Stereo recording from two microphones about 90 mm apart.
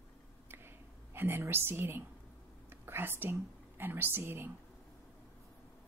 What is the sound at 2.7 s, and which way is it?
Speech, 25° right (ahead or behind).